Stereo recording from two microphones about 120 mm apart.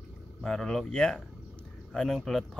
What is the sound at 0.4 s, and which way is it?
Speech, 5° left (ahead or behind).